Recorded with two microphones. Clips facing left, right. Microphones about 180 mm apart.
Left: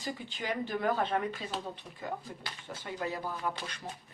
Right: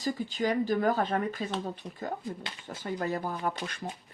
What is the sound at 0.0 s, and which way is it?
Speech, 40° right (ahead or behind).